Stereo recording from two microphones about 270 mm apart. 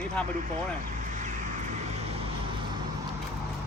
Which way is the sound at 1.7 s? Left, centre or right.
Right.